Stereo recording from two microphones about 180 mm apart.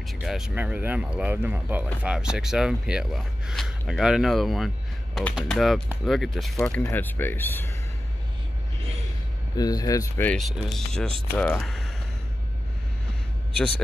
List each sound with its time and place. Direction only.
0.2 s speech: centre (ahead or behind)
9.6 s speech: 20° left (ahead or behind)
10.2 s speech: centre (ahead or behind)